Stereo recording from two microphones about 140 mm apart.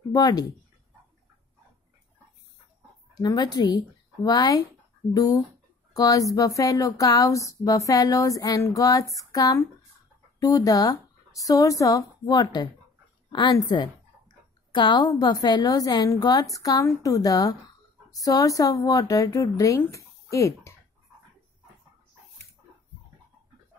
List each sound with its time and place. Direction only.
0.1 s a woman's voice: 30° left (ahead or behind)
3.2 s a woman's voice: 30° left (ahead or behind)